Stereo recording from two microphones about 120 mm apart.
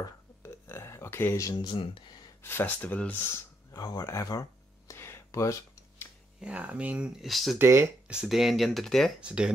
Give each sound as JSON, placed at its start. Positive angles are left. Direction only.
{"t": 0.0, "sound": "a sound", "side_deg": 20}
{"t": 2.4, "sound": "speech", "side_deg": 15}
{"t": 3.7, "sound": "a sound", "side_deg": 30}
{"t": 6.4, "sound": "speech", "side_deg": -10}
{"t": 7.5, "sound": "speech", "side_deg": -20}
{"t": 8.1, "sound": "speech", "side_deg": -5}
{"t": 9.2, "sound": "speech", "side_deg": -10}